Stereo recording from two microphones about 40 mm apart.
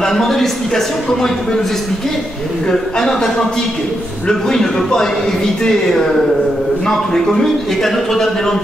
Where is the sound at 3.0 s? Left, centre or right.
Centre.